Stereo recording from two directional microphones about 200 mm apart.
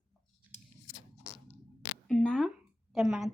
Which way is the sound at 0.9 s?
15° left (ahead or behind).